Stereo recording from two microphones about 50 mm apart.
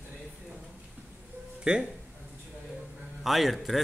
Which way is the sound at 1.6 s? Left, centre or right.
Centre.